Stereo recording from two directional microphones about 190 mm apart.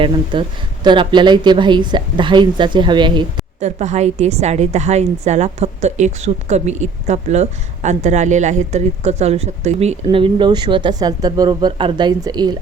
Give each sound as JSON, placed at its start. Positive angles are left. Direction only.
{"t": 0.0, "sound": "a woman's voice", "side_deg": -25}
{"t": 3.6, "sound": "a woman's voice", "side_deg": -35}